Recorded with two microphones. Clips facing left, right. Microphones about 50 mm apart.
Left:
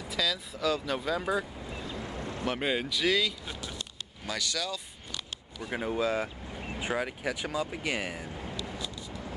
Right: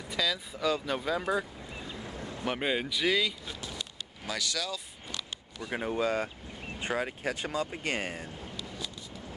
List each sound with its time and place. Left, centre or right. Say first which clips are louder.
0.1 s speech: even; centre
1.6 s vehicle: left 3 dB; centre
2.4 s speech: even; centre
8.3 s a sound: left 4 dB; left